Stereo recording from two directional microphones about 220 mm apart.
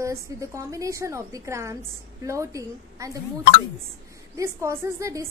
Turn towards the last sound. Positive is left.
turn(degrees=-15)  # may be behind; listen again after turning